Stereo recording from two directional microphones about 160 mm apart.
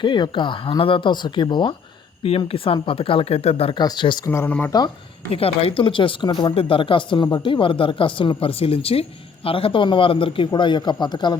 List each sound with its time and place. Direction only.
0.0 s speech: 30° left (ahead or behind)
4.3 s speech: 10° left (ahead or behind)
5.3 s speech: 35° left (ahead or behind)